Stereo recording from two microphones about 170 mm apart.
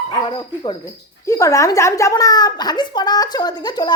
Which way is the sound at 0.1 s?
30° left (ahead or behind).